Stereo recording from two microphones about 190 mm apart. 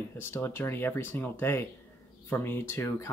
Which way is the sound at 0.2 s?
10° left (ahead or behind).